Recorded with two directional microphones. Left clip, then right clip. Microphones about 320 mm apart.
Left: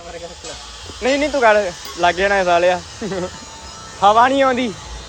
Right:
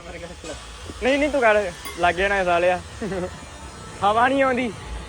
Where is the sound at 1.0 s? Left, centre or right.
Centre.